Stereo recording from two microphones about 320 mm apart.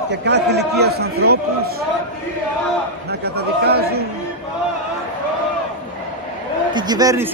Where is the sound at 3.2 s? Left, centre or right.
Right.